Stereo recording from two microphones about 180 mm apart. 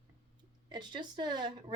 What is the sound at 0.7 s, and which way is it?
Speech, 25° right (ahead or behind).